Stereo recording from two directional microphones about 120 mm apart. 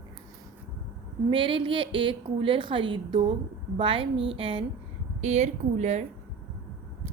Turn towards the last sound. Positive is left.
turn(degrees=-70)  # may be behind; listen again after turning